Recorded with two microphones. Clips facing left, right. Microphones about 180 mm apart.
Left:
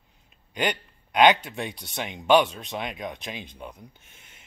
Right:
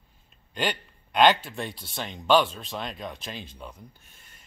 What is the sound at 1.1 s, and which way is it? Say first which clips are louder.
Speech: left 1 dB; 15° left (ahead or behind).